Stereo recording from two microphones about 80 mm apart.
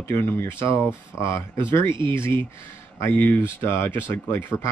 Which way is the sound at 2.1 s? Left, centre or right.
Left.